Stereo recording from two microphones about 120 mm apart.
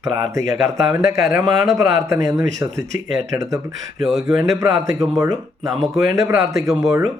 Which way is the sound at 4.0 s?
5° right (ahead or behind).